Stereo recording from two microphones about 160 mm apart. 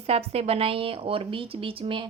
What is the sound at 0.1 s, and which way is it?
A woman's voice, 40° right (ahead or behind).